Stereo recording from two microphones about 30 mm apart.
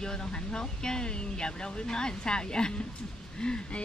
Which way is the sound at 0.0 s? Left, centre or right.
Left.